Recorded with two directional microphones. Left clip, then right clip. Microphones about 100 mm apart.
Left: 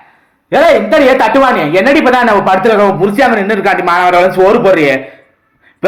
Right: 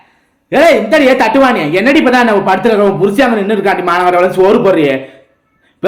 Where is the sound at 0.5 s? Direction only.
35° right (ahead or behind).